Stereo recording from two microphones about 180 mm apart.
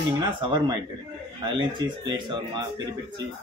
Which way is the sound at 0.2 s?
25° right (ahead or behind).